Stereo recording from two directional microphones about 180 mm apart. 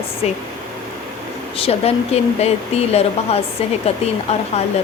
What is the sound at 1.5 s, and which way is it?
Speech, 35° left (ahead or behind).